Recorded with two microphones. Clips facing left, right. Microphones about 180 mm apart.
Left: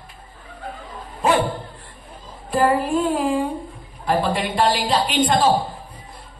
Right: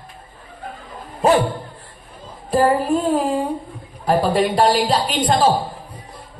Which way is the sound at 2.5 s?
40° right (ahead or behind).